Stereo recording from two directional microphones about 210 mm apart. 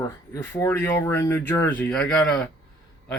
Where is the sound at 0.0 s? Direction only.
15° left (ahead or behind).